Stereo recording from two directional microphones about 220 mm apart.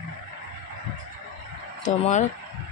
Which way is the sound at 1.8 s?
30° left (ahead or behind).